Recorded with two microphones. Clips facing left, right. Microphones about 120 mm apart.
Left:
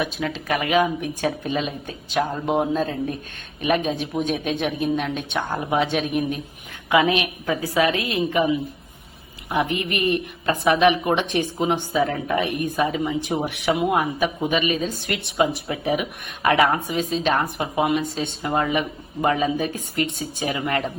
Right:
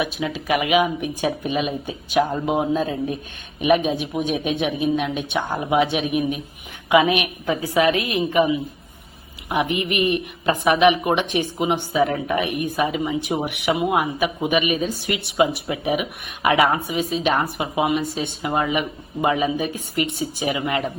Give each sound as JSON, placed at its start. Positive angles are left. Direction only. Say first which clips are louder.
{"t": 0.0, "sound": "a woman's voice", "louder": "right 1 dB", "side_deg": -5}
{"t": 9.5, "sound": "a woman's voice", "louder": "right 1 dB", "side_deg": -15}
{"t": 13.7, "sound": "a woman's voice", "louder": "right 1 dB", "side_deg": -5}